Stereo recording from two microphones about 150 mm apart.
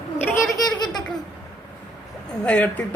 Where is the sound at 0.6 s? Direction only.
30° left (ahead or behind).